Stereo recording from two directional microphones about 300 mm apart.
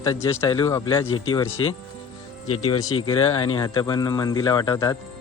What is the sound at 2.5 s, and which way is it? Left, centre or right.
Speech, left.